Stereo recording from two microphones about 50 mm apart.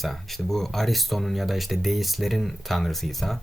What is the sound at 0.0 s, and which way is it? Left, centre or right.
Speech, centre.